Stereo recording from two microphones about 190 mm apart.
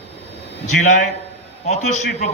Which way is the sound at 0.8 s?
40° left (ahead or behind).